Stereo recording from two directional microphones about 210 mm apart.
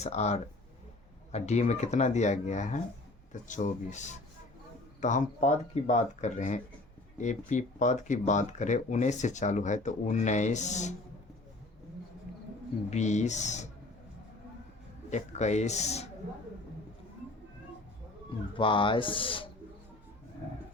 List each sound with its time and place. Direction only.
0.0 s speech: 30° left (ahead or behind)
12.9 s speech: 35° left (ahead or behind)
15.1 s speech: 35° left (ahead or behind)
18.5 s speech: 25° left (ahead or behind)